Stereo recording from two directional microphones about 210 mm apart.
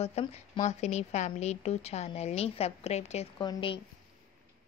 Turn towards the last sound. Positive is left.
turn(degrees=20)  # may be behind; listen again after turning